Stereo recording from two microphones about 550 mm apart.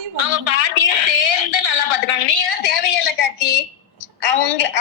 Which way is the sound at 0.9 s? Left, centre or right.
Left.